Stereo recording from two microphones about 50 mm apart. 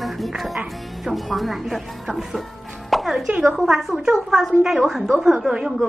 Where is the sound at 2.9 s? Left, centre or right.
Centre.